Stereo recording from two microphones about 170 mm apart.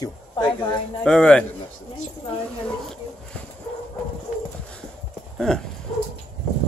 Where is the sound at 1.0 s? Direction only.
5° left (ahead or behind).